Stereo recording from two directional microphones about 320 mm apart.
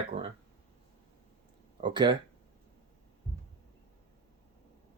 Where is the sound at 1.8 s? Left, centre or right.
Centre.